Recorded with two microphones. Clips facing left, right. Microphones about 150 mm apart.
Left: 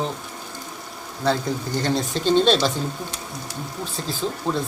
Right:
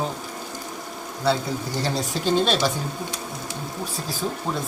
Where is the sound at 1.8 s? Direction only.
10° right (ahead or behind).